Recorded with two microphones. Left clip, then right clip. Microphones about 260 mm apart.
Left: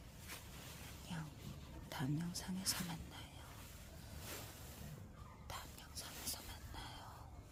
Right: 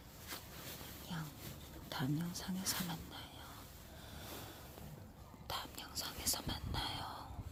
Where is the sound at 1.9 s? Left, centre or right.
Centre.